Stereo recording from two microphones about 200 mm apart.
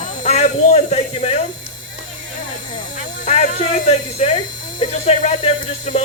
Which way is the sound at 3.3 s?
30° left (ahead or behind).